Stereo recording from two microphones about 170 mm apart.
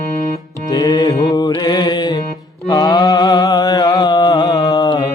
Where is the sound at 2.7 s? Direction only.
25° left (ahead or behind).